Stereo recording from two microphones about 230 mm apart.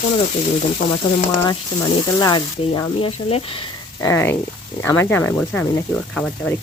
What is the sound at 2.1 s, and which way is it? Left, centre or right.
Speech, centre.